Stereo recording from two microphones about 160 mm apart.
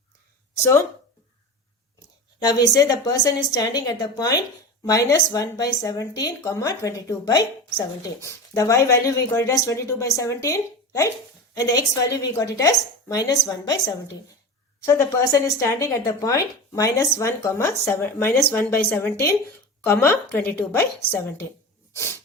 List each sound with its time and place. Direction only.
0.5 s speech: 15° left (ahead or behind)
2.4 s speech: 25° left (ahead or behind)
14.8 s a woman's voice: 20° left (ahead or behind)